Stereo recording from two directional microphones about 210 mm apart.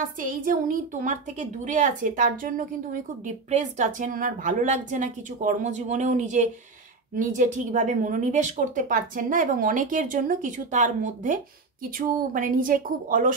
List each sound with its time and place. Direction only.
0.5 s a woman's voice: 40° right (ahead or behind)